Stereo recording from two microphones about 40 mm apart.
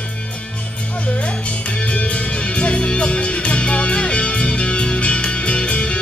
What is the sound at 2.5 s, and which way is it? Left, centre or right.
Music, left.